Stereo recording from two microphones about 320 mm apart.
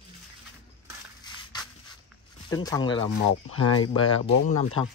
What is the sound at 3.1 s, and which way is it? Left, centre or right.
Speech, left.